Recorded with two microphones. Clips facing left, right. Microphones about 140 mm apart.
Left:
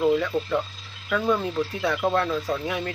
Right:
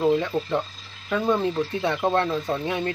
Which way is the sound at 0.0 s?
30° right (ahead or behind).